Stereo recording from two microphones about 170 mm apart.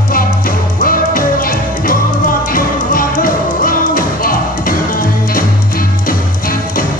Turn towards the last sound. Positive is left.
turn(degrees=55)  # may be behind; listen again after turning